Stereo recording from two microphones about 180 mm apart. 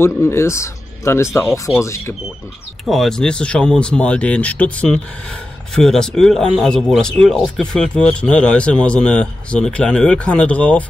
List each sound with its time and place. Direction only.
0.0 s speech: 15° left (ahead or behind)
2.8 s speech: centre (ahead or behind)